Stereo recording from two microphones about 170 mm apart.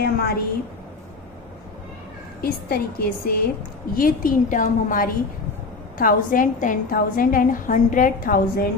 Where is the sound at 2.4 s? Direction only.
65° left (ahead or behind).